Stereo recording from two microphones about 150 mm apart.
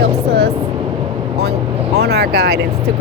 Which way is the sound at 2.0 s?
90° right.